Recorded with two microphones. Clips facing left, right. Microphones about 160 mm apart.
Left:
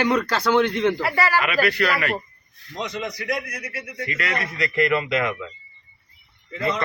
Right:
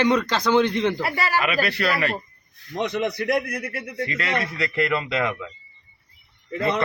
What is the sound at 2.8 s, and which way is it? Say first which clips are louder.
A man's voice: right 5 dB; 60° right (ahead or behind).